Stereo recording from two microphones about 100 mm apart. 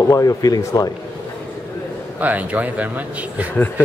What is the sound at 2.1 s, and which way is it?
Speech, 15° right (ahead or behind).